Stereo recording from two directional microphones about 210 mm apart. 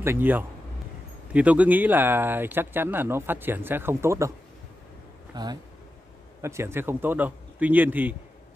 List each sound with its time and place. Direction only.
0.0 s speech: 10° right (ahead or behind)
5.3 s speech: 20° right (ahead or behind)